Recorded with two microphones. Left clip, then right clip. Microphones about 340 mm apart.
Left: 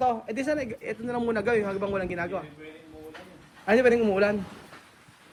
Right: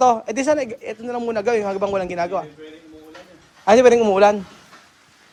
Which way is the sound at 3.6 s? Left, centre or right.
Centre.